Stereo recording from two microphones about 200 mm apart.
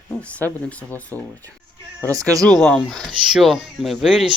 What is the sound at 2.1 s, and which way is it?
Speech, 15° right (ahead or behind).